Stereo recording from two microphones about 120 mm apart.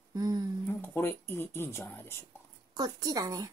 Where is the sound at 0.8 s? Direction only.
20° left (ahead or behind).